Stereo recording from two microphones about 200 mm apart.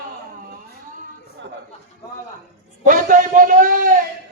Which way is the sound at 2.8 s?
40° right (ahead or behind).